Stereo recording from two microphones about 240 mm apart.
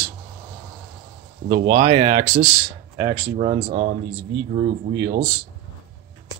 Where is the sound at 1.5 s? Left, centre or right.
Right.